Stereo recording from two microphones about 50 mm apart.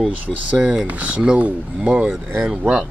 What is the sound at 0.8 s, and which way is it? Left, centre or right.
Speech, right.